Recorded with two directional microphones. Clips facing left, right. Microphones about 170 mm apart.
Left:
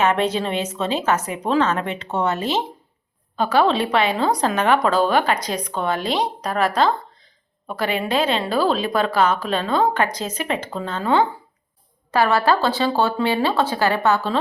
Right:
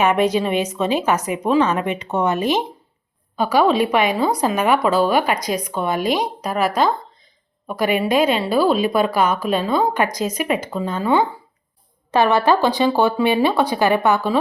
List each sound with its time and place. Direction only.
0.0 s a woman's voice: 10° right (ahead or behind)
12.1 s a woman's voice: 20° right (ahead or behind)